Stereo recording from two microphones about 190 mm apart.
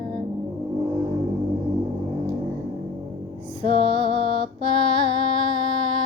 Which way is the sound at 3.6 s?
30° right (ahead or behind).